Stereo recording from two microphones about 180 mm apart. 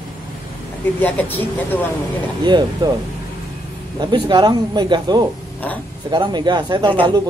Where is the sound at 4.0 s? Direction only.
25° right (ahead or behind).